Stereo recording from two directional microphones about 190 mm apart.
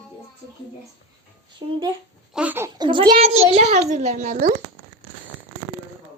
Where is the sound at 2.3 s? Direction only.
10° right (ahead or behind).